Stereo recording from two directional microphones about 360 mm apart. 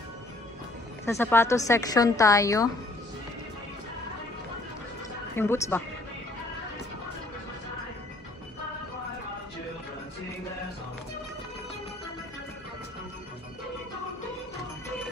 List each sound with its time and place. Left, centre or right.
1.0 s a woman's voice: centre
5.3 s speech: centre